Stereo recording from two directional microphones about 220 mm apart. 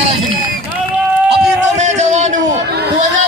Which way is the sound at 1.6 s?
30° right (ahead or behind).